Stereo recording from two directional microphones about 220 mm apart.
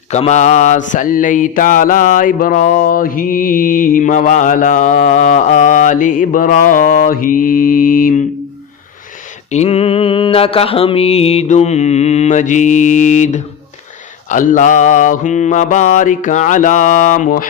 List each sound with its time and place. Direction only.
0.1 s mantra: 30° left (ahead or behind)
9.5 s mantra: 30° left (ahead or behind)